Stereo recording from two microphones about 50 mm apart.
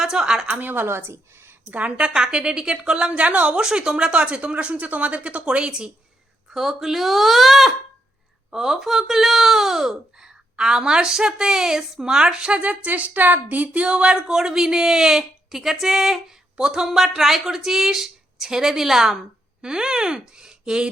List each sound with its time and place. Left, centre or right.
0.0 s a woman's voice: centre
0.4 s a woman's voice: right
0.9 s speech: right
1.7 s a woman's voice: right
3.6 s a woman's voice: centre
6.5 s speech: centre